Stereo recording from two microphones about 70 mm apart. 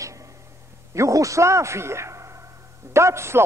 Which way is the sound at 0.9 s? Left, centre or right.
Right.